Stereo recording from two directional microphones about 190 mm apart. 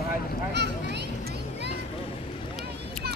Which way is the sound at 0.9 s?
60° right (ahead or behind).